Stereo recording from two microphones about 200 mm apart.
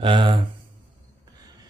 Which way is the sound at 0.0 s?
25° right (ahead or behind).